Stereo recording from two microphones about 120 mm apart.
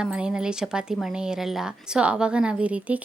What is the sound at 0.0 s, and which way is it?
Speech, 10° right (ahead or behind).